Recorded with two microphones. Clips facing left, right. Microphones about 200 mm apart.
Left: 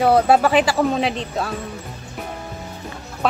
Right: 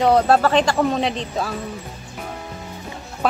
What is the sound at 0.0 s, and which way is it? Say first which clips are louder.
Speech: left 1 dB; 10° left (ahead or behind).